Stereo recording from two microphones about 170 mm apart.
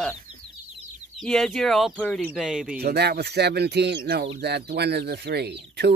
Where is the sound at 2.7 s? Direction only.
70° right (ahead or behind).